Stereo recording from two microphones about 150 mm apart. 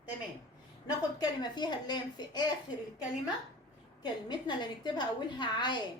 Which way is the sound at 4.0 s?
30° left (ahead or behind).